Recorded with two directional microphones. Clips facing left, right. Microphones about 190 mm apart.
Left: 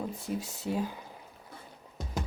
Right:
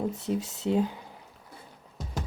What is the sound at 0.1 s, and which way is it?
Speech, 20° right (ahead or behind).